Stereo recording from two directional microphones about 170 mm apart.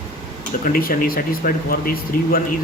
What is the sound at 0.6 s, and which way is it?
Speech, 55° left (ahead or behind).